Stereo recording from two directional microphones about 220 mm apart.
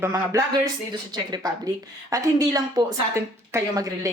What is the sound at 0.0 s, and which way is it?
A woman's voice, 15° right (ahead or behind).